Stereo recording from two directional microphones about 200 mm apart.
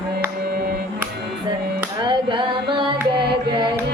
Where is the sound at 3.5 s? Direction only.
20° right (ahead or behind).